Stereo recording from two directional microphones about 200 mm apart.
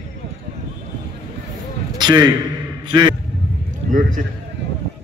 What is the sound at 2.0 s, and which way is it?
A man's voice, 20° right (ahead or behind).